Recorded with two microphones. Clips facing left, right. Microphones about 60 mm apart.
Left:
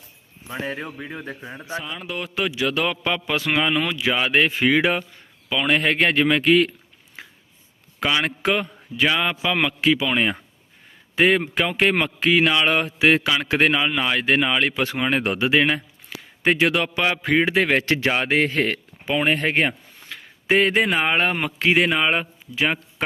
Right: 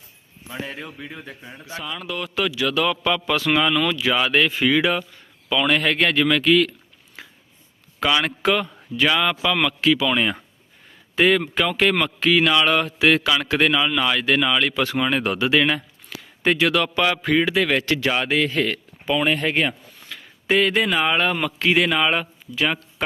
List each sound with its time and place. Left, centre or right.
0.6 s speech: left
1.5 s speech: left
1.8 s a man's voice: left
5.5 s a man's voice: centre
7.2 s a sound: left
7.9 s a man's voice: centre
9.0 s a man's voice: centre